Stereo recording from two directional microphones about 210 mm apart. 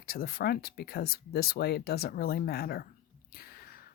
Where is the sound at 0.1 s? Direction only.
45° left (ahead or behind).